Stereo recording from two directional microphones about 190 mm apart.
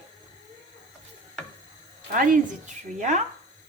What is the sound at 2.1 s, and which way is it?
A woman's voice, 45° right (ahead or behind).